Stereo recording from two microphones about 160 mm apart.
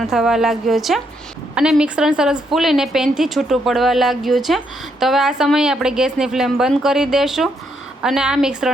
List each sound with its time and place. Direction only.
0.0 s a woman's voice: 5° right (ahead or behind)